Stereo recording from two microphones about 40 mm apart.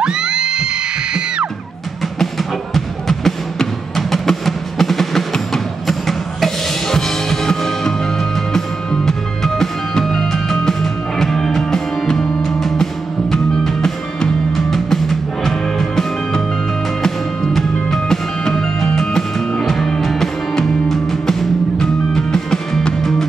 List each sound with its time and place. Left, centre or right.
0.0 s music: right
2.1 s music: centre
17.5 s music: centre
18.4 s music: centre